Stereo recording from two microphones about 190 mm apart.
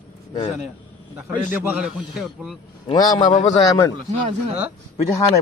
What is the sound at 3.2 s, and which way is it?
Speech, 40° left (ahead or behind).